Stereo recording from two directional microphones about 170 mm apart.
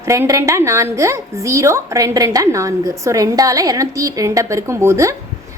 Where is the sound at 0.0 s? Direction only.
15° right (ahead or behind).